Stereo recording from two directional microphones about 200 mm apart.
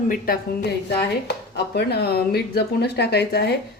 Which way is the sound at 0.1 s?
45° left (ahead or behind).